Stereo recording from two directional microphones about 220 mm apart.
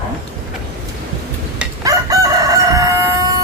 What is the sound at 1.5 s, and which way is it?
Crowing, 15° right (ahead or behind).